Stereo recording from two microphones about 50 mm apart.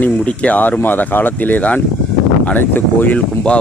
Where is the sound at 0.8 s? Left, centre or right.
Left.